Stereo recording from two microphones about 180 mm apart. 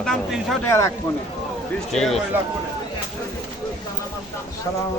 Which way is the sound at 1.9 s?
Centre (ahead or behind).